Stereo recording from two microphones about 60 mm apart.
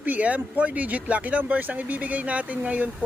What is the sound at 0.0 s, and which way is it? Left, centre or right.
Speech, right.